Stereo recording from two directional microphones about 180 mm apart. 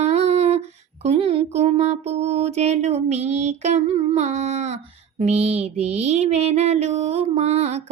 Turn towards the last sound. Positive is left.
turn(degrees=-35)  # may be behind; listen again after turning